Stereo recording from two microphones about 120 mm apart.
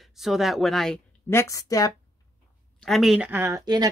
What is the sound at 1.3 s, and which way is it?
Speech, 25° left (ahead or behind).